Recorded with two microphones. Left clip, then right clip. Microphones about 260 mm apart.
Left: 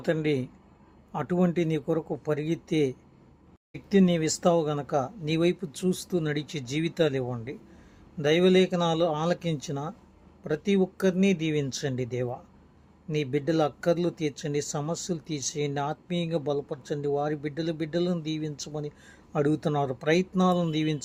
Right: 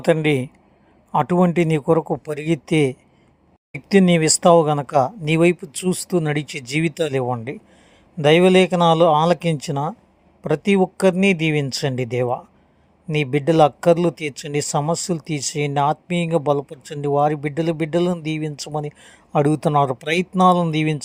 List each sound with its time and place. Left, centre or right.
0.0 s speech: right